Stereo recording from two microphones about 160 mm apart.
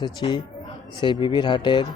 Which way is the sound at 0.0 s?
30° left (ahead or behind).